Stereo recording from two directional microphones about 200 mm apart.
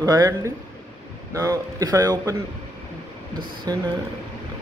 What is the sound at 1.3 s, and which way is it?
A man's voice, 15° right (ahead or behind).